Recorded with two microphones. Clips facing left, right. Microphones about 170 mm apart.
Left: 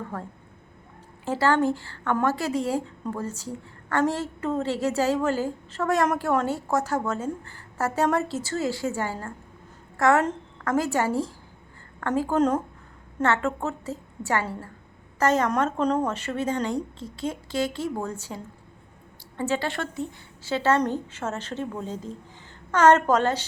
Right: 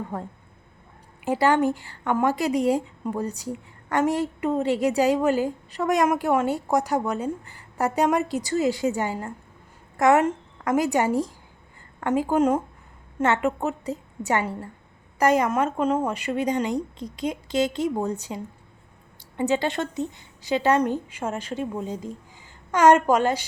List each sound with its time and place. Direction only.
0.1 s speech: 20° right (ahead or behind)
19.4 s speech: 20° right (ahead or behind)